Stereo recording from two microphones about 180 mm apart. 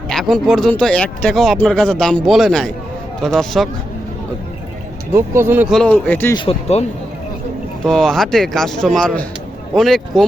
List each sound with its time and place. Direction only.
0.1 s speech: 5° left (ahead or behind)
5.1 s speech: 15° right (ahead or behind)
5.7 s a man's voice: 5° left (ahead or behind)
6.3 s speech: 30° left (ahead or behind)
7.9 s speech: centre (ahead or behind)